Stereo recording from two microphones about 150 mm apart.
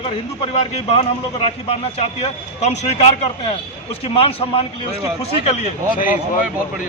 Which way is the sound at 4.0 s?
40° left (ahead or behind).